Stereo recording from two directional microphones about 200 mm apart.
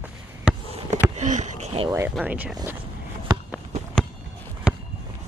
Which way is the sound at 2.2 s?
10° right (ahead or behind).